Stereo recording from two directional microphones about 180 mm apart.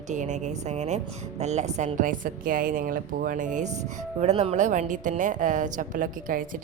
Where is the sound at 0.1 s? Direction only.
40° right (ahead or behind).